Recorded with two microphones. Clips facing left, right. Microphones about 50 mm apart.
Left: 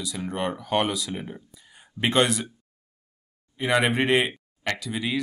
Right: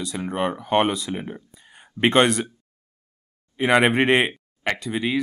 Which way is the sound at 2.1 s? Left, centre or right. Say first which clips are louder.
Right 4 dB; right.